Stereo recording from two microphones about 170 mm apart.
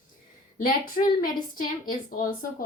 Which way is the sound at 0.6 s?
55° left (ahead or behind).